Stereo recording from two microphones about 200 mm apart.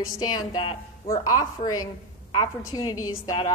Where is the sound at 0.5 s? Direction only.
25° left (ahead or behind).